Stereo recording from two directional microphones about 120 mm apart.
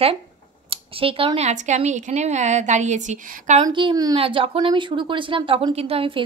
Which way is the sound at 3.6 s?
35° right (ahead or behind).